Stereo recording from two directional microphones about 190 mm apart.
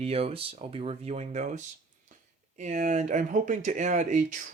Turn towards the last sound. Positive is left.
turn(degrees=-40)  # may be behind; listen again after turning